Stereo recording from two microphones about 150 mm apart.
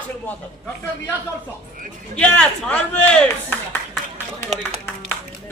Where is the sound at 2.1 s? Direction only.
10° left (ahead or behind).